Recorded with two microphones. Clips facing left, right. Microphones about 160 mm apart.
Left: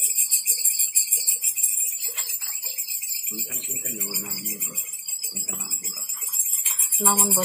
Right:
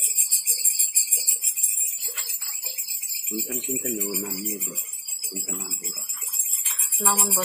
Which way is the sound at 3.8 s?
55° right (ahead or behind).